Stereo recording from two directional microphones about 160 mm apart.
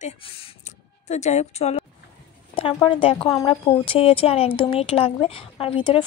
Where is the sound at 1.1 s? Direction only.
45° left (ahead or behind).